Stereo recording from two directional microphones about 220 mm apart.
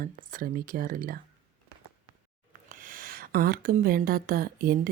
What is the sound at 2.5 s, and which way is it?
Speech, 40° right (ahead or behind).